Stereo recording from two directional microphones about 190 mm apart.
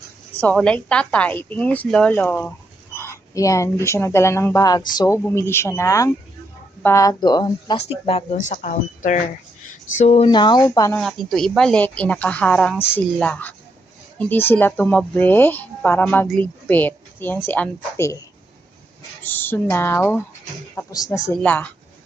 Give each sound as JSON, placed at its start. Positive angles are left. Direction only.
{"t": 0.3, "sound": "speech", "side_deg": 5}
{"t": 8.0, "sound": "speech", "side_deg": 35}
{"t": 10.2, "sound": "speech", "side_deg": 25}
{"t": 10.9, "sound": "a woman's voice", "side_deg": 0}
{"t": 12.7, "sound": "a woman's voice", "side_deg": -5}
{"t": 13.2, "sound": "speech", "side_deg": 5}
{"t": 19.2, "sound": "speech", "side_deg": 10}